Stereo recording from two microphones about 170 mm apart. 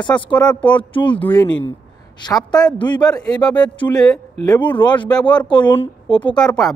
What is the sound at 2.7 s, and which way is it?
Speech, 25° left (ahead or behind).